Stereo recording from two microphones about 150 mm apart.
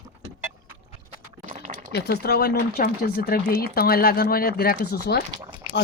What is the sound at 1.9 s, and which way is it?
Speech, 90° left.